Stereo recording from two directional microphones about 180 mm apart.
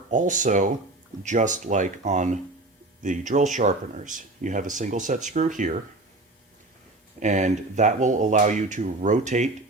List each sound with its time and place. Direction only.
0.1 s speech: 45° right (ahead or behind)
7.2 s speech: 40° right (ahead or behind)